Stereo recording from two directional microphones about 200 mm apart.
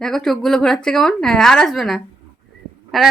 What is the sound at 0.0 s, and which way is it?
A woman's voice, centre (ahead or behind).